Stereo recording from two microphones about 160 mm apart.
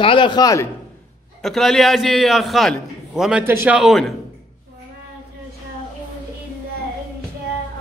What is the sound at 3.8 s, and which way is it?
Speech, centre (ahead or behind).